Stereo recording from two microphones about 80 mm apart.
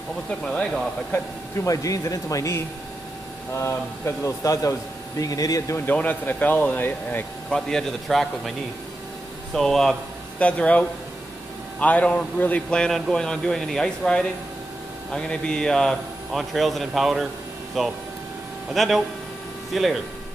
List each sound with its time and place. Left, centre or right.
0.3 s a man's voice: centre
1.7 s speech: left
5.9 s speech: left
7.4 s a man's voice: centre
10.4 s a man's voice: centre